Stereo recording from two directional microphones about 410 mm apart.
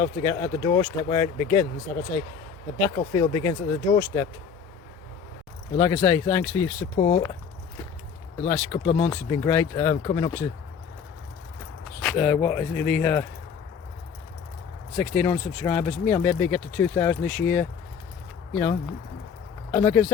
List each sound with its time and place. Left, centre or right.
0.0 s speech: centre
2.8 s speech: centre
5.8 s speech: centre
8.4 s speech: centre
11.9 s speech: centre
14.9 s speech: centre